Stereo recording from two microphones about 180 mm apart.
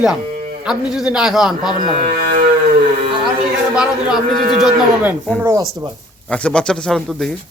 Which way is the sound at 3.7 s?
5° right (ahead or behind).